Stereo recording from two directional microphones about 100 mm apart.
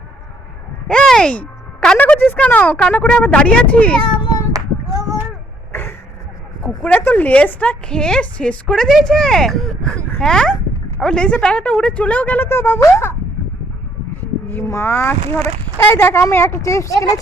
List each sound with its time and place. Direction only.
0.9 s a woman's voice: 10° left (ahead or behind)
4.0 s child singing: 45° left (ahead or behind)
4.5 s female singing: 35° right (ahead or behind)
6.8 s a woman's voice: 15° left (ahead or behind)
14.4 s a sound: 20° left (ahead or behind)
14.7 s speech: 25° left (ahead or behind)